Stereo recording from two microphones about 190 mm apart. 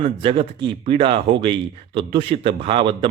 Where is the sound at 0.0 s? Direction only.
30° right (ahead or behind).